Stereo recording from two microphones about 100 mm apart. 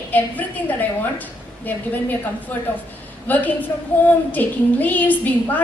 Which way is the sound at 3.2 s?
15° left (ahead or behind).